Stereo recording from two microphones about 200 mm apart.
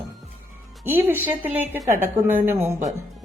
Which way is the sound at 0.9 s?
10° right (ahead or behind).